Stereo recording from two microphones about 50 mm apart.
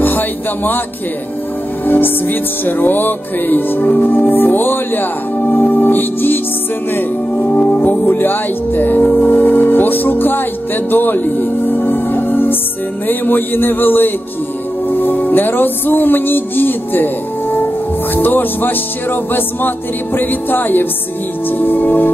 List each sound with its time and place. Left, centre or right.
0.0 s speech: left
1.9 s music: left
7.5 s music: left
8.1 s speech: left
13.0 s music: left